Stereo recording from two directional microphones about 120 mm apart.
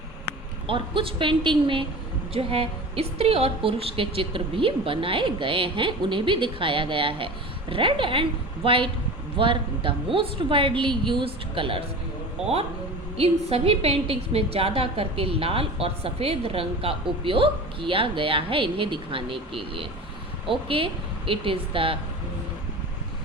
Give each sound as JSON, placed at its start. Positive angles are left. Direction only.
{"t": 0.7, "sound": "a woman's voice", "side_deg": -45}
{"t": 13.1, "sound": "a woman's voice", "side_deg": -55}